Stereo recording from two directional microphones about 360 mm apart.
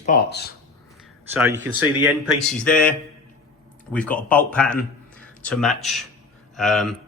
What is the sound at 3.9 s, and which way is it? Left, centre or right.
A man's voice, centre.